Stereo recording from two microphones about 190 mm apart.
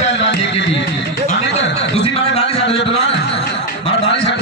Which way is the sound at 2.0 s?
30° left (ahead or behind).